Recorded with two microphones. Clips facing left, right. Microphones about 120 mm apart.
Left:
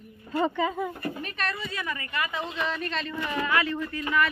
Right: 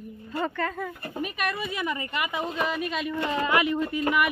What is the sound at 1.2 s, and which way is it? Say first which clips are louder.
A woman's voice: right 3 dB; 15° right (ahead or behind).